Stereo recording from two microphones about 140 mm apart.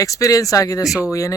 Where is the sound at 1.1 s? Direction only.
20° left (ahead or behind).